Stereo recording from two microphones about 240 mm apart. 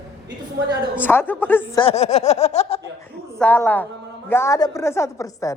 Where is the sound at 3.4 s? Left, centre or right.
Centre.